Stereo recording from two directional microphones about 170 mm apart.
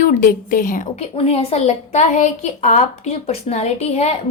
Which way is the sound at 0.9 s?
35° left (ahead or behind).